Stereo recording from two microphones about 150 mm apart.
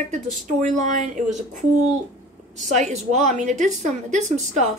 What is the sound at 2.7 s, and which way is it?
A woman's voice, 50° right (ahead or behind).